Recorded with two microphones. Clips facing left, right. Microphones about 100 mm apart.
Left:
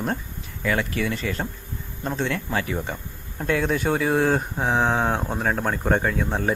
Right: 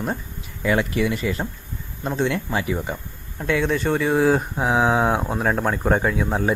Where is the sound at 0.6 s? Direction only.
20° right (ahead or behind).